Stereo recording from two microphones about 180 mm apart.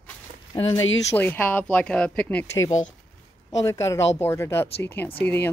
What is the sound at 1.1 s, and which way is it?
Speech, 10° left (ahead or behind).